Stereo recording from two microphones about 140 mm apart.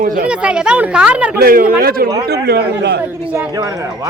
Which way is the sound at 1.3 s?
90° right.